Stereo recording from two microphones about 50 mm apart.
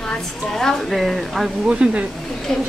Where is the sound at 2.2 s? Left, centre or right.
Centre.